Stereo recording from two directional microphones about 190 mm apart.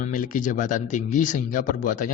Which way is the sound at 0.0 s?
45° left (ahead or behind).